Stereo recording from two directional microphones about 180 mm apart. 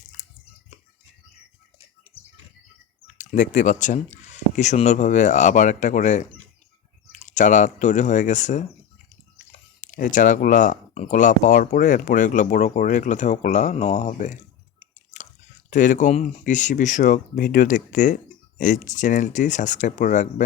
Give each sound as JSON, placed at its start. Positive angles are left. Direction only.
{"t": 2.1, "sound": "squawk", "side_deg": -5}
{"t": 3.2, "sound": "speech", "side_deg": 45}
{"t": 9.8, "sound": "speech", "side_deg": 45}
{"t": 14.8, "sound": "a sound", "side_deg": 40}
{"t": 15.7, "sound": "speech", "side_deg": 45}